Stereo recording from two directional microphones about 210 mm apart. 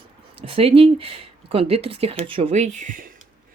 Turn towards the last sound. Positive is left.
turn(degrees=-40)  # may be behind; listen again after turning